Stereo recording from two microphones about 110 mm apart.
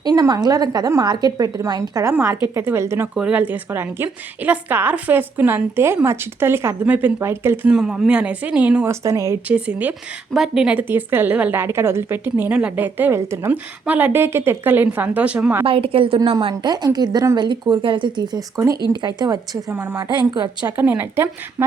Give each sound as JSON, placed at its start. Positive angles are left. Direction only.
{"t": 0.0, "sound": "a sound", "side_deg": -40}
{"t": 0.4, "sound": "a woman's voice", "side_deg": -35}
{"t": 3.2, "sound": "a woman's voice", "side_deg": -10}
{"t": 7.7, "sound": "a woman's voice", "side_deg": -5}
{"t": 8.9, "sound": "a woman's voice", "side_deg": -30}
{"t": 9.5, "sound": "a woman's voice", "side_deg": -10}
{"t": 15.6, "sound": "a woman's voice", "side_deg": -55}
{"t": 19.7, "sound": "a woman's voice", "side_deg": -20}
{"t": 20.0, "sound": "a woman's voice", "side_deg": -40}
{"t": 20.7, "sound": "a woman's voice", "side_deg": -20}